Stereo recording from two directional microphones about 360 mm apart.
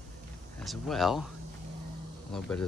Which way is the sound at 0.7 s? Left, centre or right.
Centre.